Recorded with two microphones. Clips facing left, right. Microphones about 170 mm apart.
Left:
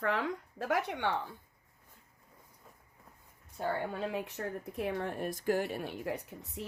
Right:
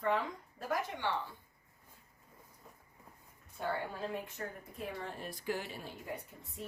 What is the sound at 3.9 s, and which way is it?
Speech, 75° left (ahead or behind).